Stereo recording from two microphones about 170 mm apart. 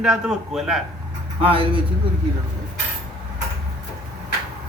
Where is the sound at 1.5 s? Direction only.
30° right (ahead or behind).